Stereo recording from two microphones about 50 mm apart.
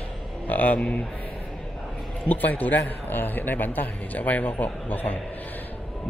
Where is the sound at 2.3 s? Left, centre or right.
Left.